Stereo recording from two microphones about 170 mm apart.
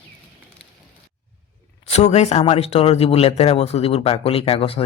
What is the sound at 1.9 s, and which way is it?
Speech, 40° left (ahead or behind).